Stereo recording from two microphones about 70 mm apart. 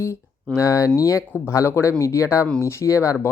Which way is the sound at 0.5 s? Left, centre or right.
Left.